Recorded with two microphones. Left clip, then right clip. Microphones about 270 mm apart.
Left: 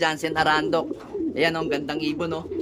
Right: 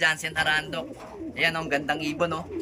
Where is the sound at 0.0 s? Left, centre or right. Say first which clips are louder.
Left 2 dB; centre.